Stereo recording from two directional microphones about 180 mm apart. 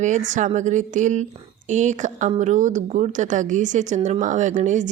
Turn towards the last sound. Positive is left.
turn(degrees=-45)  # may be behind; listen again after turning